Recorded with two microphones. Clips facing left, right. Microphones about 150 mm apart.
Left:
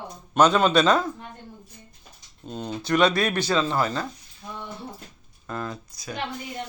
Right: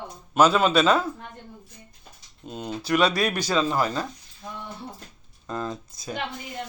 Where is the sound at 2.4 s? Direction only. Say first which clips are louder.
Even; 5° right (ahead or behind).